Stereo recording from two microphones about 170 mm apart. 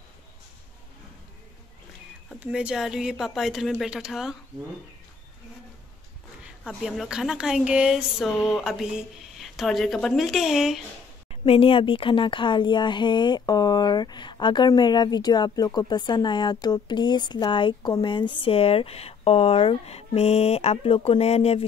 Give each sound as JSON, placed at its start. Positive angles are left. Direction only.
{"t": 2.4, "sound": "speech", "side_deg": -5}
{"t": 6.6, "sound": "speech", "side_deg": 0}
{"t": 11.2, "sound": "speech", "side_deg": 35}